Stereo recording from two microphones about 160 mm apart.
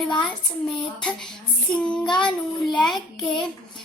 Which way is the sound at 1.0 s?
5° left (ahead or behind).